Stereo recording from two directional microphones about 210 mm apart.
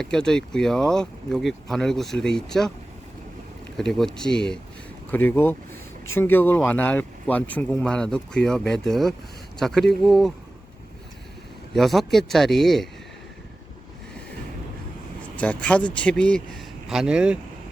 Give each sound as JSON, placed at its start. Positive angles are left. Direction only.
{"t": 0.0, "sound": "speech", "side_deg": 5}
{"t": 3.8, "sound": "speech", "side_deg": 0}
{"t": 11.7, "sound": "speech", "side_deg": 0}
{"t": 15.4, "sound": "speech", "side_deg": 5}